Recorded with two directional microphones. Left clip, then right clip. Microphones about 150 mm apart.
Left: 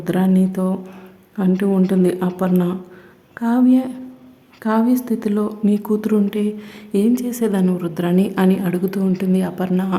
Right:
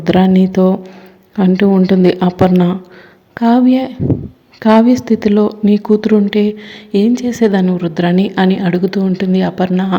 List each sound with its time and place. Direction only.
0.0 s a woman's voice: 25° right (ahead or behind)